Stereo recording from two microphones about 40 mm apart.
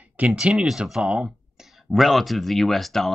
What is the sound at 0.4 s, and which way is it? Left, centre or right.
Speech, right.